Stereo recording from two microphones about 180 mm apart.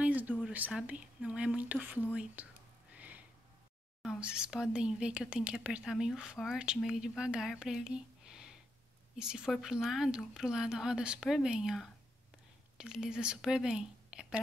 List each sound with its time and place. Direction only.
0.0 s speech: 10° right (ahead or behind)
2.9 s a sound: 10° right (ahead or behind)
4.0 s speech: 5° right (ahead or behind)